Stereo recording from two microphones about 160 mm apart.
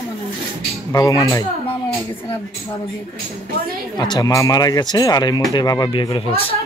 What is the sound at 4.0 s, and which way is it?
Speech, 25° left (ahead or behind).